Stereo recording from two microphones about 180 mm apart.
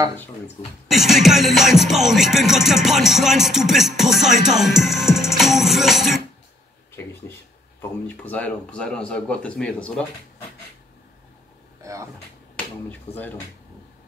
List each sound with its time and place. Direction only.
0.9 s music: centre (ahead or behind)
8.1 s music: 10° left (ahead or behind)
11.8 s a sound: 15° right (ahead or behind)
12.5 s speech: 10° left (ahead or behind)